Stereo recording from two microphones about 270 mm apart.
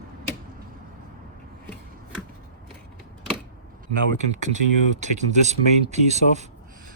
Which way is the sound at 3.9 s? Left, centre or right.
Right.